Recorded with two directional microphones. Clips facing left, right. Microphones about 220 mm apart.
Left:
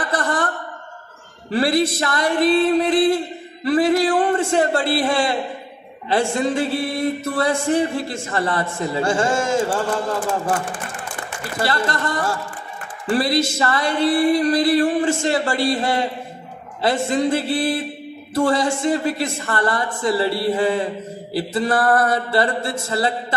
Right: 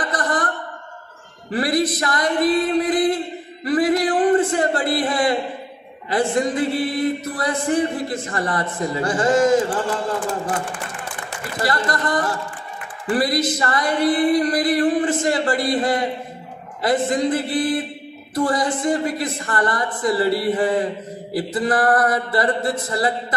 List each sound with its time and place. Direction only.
0.1 s a sound: 25° left (ahead or behind)
1.5 s mantra: 25° left (ahead or behind)
3.6 s a man's voice: 25° left (ahead or behind)
6.0 s mantra: 25° left (ahead or behind)
11.6 s mantra: 25° left (ahead or behind)